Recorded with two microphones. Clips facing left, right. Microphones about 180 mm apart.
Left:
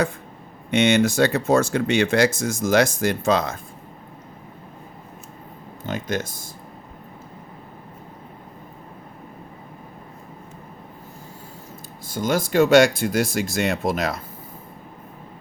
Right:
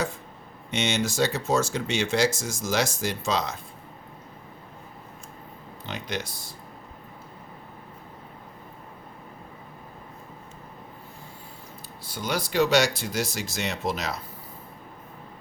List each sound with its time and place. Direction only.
0.7 s speech: 55° left (ahead or behind)
5.8 s speech: 45° left (ahead or behind)
12.0 s speech: 45° left (ahead or behind)